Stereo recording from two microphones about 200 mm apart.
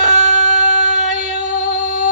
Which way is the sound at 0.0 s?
35° right (ahead or behind).